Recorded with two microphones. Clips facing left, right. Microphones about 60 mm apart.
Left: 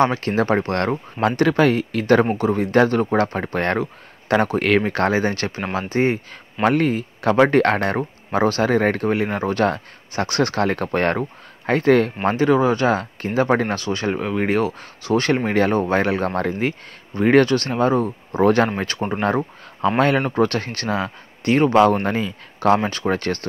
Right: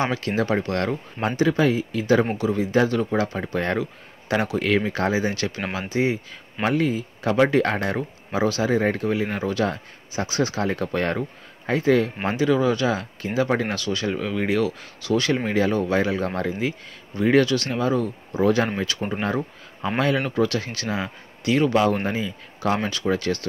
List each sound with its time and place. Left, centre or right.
0.1 s speech: left
1.2 s speech: left
2.3 s speech: left
12.3 s speech: left
15.7 s speech: left
18.4 s speech: left
22.8 s speech: left